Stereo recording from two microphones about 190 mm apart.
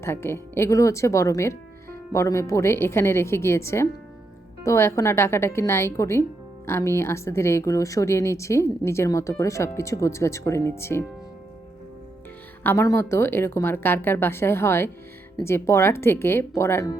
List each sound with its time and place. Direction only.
0.0 s a woman's voice: 15° left (ahead or behind)
12.6 s a woman's voice: 15° left (ahead or behind)